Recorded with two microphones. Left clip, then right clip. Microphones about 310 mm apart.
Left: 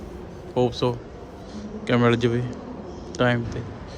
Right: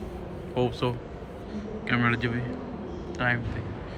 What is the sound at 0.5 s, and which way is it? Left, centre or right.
A man's voice, centre.